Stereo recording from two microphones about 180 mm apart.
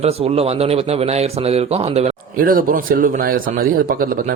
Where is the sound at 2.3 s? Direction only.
50° right (ahead or behind).